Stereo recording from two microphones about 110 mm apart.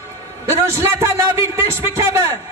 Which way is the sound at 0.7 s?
25° right (ahead or behind).